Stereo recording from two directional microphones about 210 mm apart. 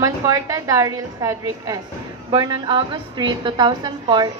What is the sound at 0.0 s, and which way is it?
A woman's voice, 15° right (ahead or behind).